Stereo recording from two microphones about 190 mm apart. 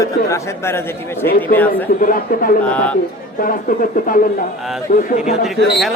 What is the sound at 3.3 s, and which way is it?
Speech, 45° left (ahead or behind).